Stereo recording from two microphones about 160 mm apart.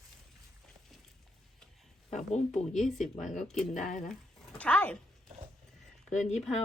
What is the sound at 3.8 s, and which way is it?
Speech, 55° left (ahead or behind).